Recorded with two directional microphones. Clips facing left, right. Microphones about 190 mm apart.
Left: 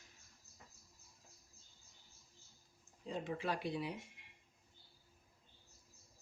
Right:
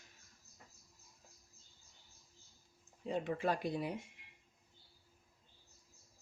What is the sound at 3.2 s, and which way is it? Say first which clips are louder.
Speech: right 3 dB; 50° right (ahead or behind).